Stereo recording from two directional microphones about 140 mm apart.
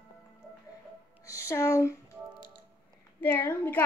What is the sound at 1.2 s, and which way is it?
Music, 20° left (ahead or behind).